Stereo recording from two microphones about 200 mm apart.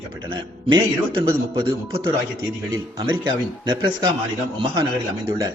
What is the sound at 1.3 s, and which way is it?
Speech, 25° right (ahead or behind).